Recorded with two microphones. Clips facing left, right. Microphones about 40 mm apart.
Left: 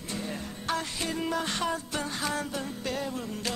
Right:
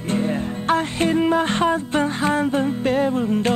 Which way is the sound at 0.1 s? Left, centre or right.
Right.